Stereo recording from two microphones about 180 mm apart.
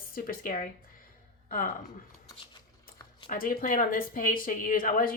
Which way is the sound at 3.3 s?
50° left (ahead or behind).